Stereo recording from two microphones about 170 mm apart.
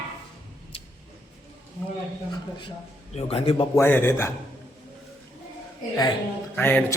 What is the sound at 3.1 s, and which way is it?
Speech, 35° left (ahead or behind).